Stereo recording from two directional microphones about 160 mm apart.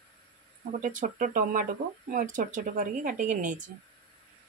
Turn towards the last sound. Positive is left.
turn(degrees=-50)  # may be behind; listen again after turning